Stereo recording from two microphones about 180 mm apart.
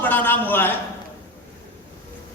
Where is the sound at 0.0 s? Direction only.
10° left (ahead or behind).